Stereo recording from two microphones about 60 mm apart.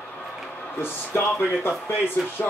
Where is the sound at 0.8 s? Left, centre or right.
Left.